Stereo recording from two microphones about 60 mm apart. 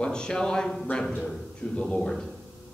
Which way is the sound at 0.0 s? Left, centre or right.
Centre.